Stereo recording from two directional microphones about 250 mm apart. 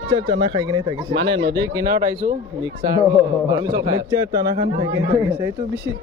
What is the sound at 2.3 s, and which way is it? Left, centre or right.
A man's voice, centre.